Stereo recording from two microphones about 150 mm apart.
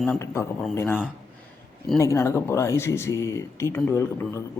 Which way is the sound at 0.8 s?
15° left (ahead or behind).